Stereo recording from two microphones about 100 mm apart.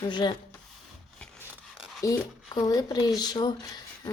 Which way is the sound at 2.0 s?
35° left (ahead or behind).